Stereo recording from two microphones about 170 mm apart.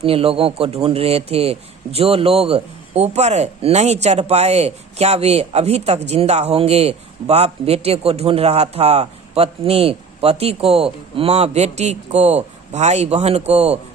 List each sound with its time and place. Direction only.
0.0 s a man's voice: 35° right (ahead or behind)